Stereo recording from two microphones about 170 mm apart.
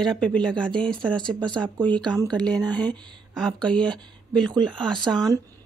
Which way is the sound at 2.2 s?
5° left (ahead or behind).